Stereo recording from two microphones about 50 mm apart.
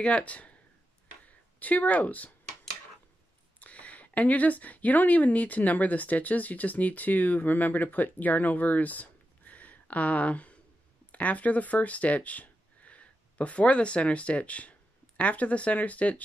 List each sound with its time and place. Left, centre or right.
0.0 s speech: left
3.5 s speech: left